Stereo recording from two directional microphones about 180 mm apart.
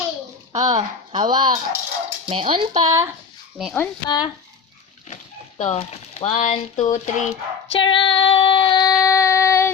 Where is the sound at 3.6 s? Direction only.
Centre (ahead or behind).